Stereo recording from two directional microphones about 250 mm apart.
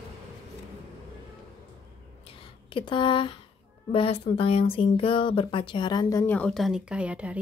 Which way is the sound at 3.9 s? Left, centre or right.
Left.